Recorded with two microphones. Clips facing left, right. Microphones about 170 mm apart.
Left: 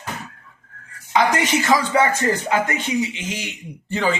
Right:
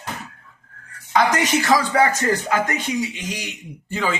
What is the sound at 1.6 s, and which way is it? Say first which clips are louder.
Speech: even; 20° left (ahead or behind).